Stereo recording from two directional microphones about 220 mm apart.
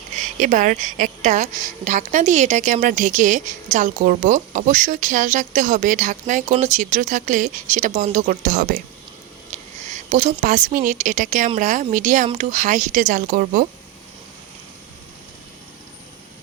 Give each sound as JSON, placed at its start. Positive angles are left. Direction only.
{"t": 0.2, "sound": "a woman's voice", "side_deg": -35}
{"t": 9.5, "sound": "a sound", "side_deg": -30}
{"t": 10.4, "sound": "a woman's voice", "side_deg": -35}